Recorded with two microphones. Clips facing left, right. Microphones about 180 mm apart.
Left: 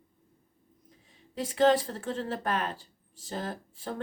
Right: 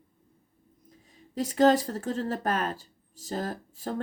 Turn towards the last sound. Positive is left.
turn(degrees=-40)  # may be behind; listen again after turning